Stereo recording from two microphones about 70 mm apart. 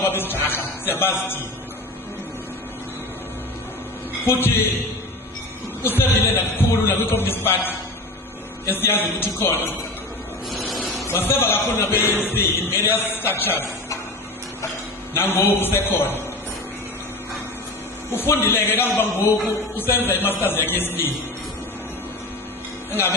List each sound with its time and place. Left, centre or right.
0.0 s a man's voice: left
4.3 s a man's voice: left
5.8 s a man's voice: left
10.5 s a sound: centre
11.1 s a man's voice: left
15.1 s a man's voice: left
18.1 s a man's voice: left
19.9 s a man's voice: left
22.9 s music: left